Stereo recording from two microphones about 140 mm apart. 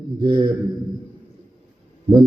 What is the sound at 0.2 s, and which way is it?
Speech, 30° right (ahead or behind).